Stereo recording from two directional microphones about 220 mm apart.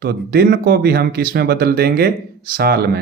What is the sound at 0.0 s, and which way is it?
Speech, 45° right (ahead or behind).